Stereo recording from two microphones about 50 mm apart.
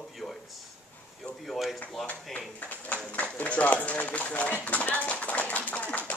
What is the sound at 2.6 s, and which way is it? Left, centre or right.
Speech, left.